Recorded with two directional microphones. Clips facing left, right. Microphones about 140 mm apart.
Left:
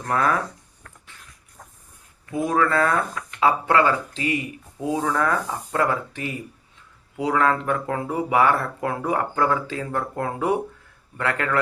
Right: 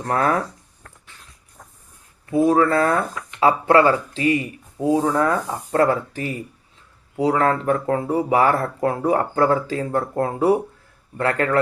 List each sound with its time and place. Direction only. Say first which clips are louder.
0.0 s speech: right 2 dB; 35° right (ahead or behind)
2.2 s speech: right 6 dB; 30° right (ahead or behind)
5.0 s rub: right 4 dB; 30° right (ahead or behind)
5.7 s speech: right 5 dB; 35° right (ahead or behind)